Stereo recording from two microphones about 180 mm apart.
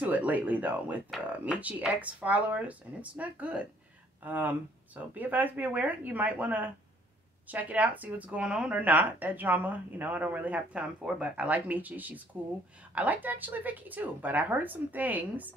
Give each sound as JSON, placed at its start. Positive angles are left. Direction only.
{"t": 0.0, "sound": "a woman's voice", "side_deg": -10}